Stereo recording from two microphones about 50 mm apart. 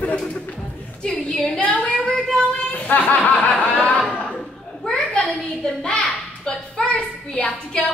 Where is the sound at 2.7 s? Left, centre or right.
Left.